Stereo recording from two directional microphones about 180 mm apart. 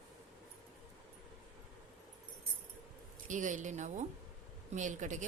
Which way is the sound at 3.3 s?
45° right (ahead or behind).